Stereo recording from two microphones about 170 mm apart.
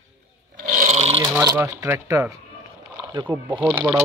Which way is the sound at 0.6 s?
50° right (ahead or behind).